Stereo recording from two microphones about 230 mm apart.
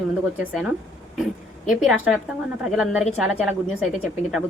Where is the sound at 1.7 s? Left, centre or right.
Centre.